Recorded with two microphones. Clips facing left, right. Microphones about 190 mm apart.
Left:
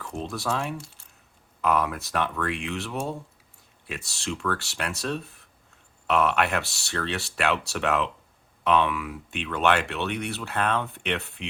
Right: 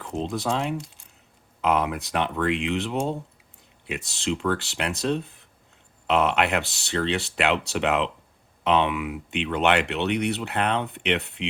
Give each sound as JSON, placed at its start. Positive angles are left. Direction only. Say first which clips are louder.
{"t": 0.0, "sound": "speech", "louder": "right 4 dB", "side_deg": -20}